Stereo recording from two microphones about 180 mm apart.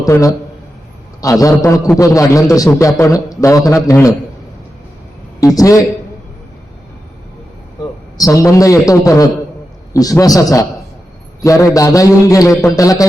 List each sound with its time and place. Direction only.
0.0 s a man's voice: 20° left (ahead or behind)
5.5 s a man's voice: 20° left (ahead or behind)
8.2 s a man's voice: 15° left (ahead or behind)